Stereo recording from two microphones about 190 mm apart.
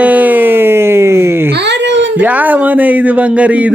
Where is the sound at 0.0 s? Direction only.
10° right (ahead or behind).